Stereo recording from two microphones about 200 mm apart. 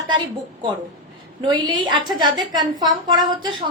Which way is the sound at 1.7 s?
25° right (ahead or behind).